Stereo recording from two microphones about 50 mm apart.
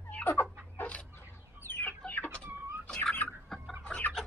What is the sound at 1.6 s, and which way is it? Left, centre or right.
Chicken, left.